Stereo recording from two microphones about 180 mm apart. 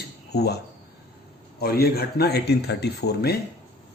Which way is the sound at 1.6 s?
60° left (ahead or behind).